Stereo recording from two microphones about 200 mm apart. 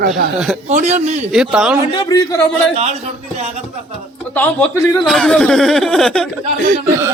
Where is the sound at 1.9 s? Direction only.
20° left (ahead or behind).